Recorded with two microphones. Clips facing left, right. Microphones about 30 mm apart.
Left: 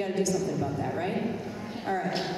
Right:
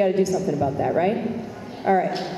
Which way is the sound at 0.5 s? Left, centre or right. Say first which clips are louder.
Right 9 dB; right.